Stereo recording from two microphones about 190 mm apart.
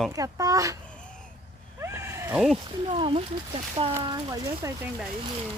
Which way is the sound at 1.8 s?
15° right (ahead or behind).